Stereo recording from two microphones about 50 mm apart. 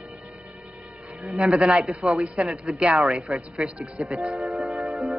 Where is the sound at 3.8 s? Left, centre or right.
Right.